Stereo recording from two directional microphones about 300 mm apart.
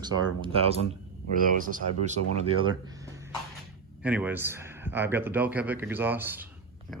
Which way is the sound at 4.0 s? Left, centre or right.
Centre.